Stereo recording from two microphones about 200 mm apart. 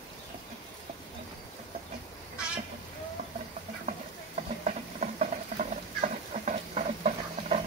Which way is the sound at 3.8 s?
40° right (ahead or behind).